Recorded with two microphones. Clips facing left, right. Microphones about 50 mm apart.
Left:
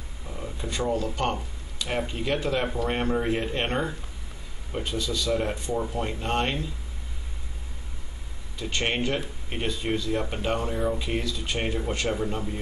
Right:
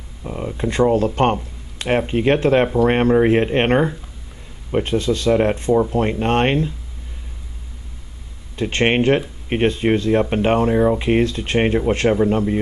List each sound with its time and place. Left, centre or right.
0.2 s speech: right
8.5 s speech: right